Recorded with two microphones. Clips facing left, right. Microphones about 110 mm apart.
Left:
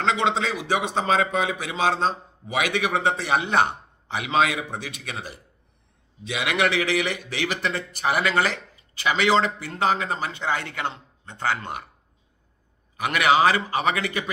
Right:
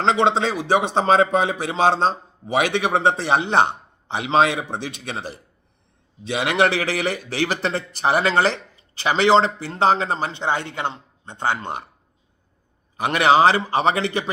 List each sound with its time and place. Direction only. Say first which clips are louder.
0.0 s a man's voice: right 5 dB; 35° right (ahead or behind)
13.0 s a man's voice: right 4 dB; 30° right (ahead or behind)